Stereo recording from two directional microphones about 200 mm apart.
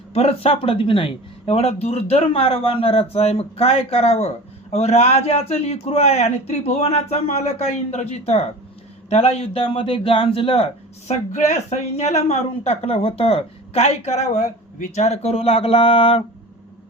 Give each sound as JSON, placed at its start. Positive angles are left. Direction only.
{"t": 0.1, "sound": "a woman's voice", "side_deg": 30}